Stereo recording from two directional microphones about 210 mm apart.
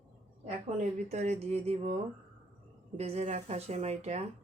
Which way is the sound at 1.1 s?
30° right (ahead or behind).